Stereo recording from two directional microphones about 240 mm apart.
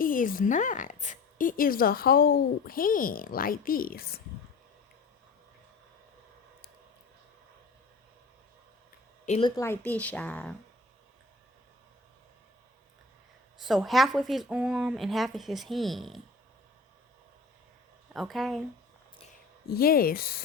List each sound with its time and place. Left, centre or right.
0.0 s a woman's voice: left
9.2 s speech: left
9.6 s speech: centre
13.6 s speech: centre
18.1 s speech: centre
19.6 s a woman's voice: left